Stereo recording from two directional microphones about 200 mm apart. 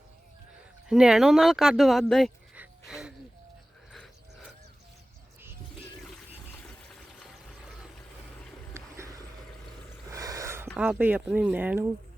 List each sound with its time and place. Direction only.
0.9 s speech: 5° right (ahead or behind)
8.7 s boat: 15° right (ahead or behind)
10.1 s a sound: 15° right (ahead or behind)
10.8 s speech: 5° right (ahead or behind)